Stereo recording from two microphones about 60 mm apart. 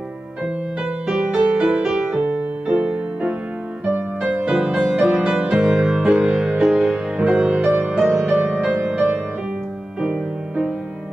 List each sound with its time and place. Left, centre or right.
1.0 s music: centre
4.5 s music: centre